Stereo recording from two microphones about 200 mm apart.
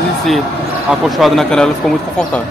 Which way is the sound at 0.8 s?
Centre (ahead or behind).